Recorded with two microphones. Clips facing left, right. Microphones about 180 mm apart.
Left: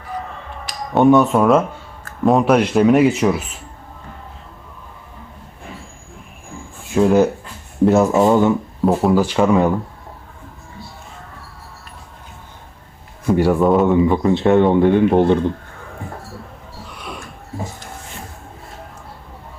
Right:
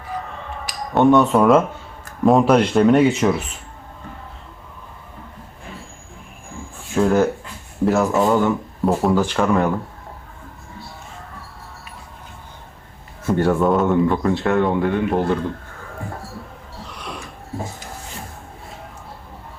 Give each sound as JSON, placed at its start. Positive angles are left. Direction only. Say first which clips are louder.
{"t": 0.5, "sound": "speech", "louder": "left 2 dB", "side_deg": 0}
{"t": 6.9, "sound": "speech", "louder": "left 3 dB", "side_deg": 15}
{"t": 8.9, "sound": "speech", "louder": "left 2 dB", "side_deg": 5}
{"t": 13.2, "sound": "speech", "louder": "left 3 dB", "side_deg": 10}
{"t": 14.1, "sound": "speech", "louder": "left 5 dB", "side_deg": 15}
{"t": 16.9, "sound": "a sound", "louder": "left 1 dB", "side_deg": 0}